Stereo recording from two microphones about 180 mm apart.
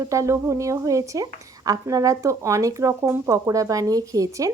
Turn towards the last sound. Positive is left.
turn(degrees=-20)  # may be behind; listen again after turning